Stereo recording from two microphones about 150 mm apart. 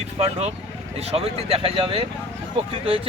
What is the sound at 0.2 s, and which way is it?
A man's voice, 45° right (ahead or behind).